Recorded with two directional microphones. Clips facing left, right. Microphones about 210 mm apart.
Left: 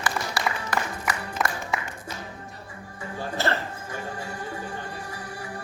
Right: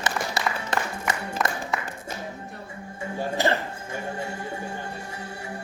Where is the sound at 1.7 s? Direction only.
Centre (ahead or behind).